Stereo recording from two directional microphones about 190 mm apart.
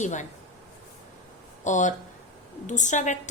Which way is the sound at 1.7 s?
40° left (ahead or behind).